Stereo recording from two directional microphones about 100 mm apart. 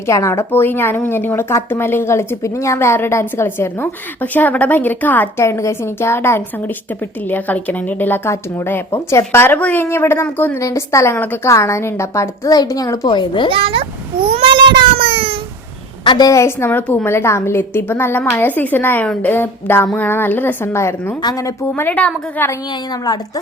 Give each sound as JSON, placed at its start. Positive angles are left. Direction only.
{"t": 0.0, "sound": "a woman's voice", "side_deg": 30}
{"t": 10.6, "sound": "a woman's voice", "side_deg": 30}
{"t": 13.1, "sound": "a child's voice", "side_deg": 55}
{"t": 13.5, "sound": "a child's voice", "side_deg": -65}
{"t": 14.9, "sound": "a sound", "side_deg": -65}
{"t": 16.0, "sound": "a woman's voice", "side_deg": 40}
{"t": 21.2, "sound": "a woman's voice", "side_deg": 40}
{"t": 21.8, "sound": "a woman's voice", "side_deg": 15}
{"t": 22.7, "sound": "a woman's voice", "side_deg": 45}